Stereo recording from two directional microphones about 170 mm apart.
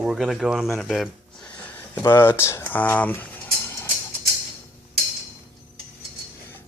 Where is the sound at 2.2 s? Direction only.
15° left (ahead or behind).